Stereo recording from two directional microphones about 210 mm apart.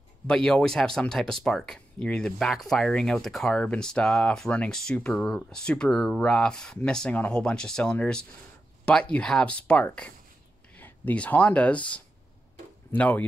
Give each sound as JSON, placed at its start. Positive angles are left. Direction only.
{"t": 0.3, "sound": "speech", "side_deg": 5}